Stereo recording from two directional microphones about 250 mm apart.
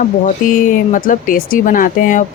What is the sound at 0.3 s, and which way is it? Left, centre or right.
Speech, left.